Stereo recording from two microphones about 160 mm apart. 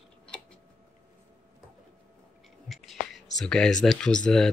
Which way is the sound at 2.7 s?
Centre (ahead or behind).